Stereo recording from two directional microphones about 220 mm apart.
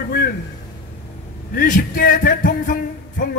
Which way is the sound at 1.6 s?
40° left (ahead or behind).